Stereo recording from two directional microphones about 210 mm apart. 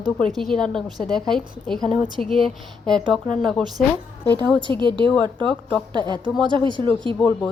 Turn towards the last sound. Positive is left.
turn(degrees=5)  # may be behind; listen again after turning